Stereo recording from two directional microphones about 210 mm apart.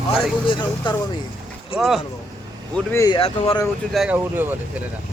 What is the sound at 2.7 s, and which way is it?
Speech, 15° left (ahead or behind).